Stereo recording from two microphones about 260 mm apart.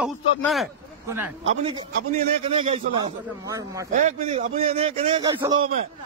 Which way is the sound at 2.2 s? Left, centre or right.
Right.